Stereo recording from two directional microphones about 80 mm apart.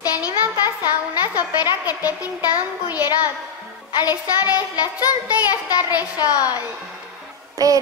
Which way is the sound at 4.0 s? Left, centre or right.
Left.